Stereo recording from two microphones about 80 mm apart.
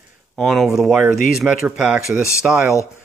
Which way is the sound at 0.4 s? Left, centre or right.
Centre.